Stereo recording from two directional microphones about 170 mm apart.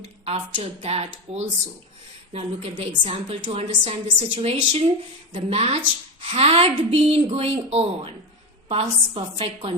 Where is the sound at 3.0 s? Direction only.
35° right (ahead or behind).